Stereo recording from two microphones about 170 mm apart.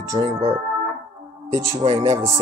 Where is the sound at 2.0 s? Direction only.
15° right (ahead or behind).